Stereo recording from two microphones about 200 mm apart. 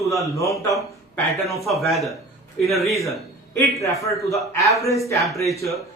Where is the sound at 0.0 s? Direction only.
15° left (ahead or behind).